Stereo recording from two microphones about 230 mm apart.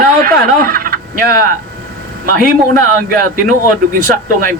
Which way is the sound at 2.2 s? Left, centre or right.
Right.